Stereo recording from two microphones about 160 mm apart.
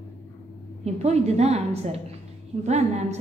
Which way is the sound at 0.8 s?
40° right (ahead or behind).